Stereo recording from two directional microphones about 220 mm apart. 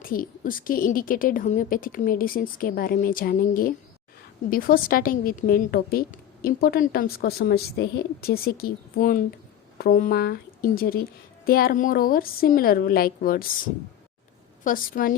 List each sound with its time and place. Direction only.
0.0 s a woman's voice: 40° left (ahead or behind)
14.6 s a woman's voice: 40° left (ahead or behind)